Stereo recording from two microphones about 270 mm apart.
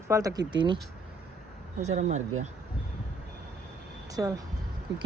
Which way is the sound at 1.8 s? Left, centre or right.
Right.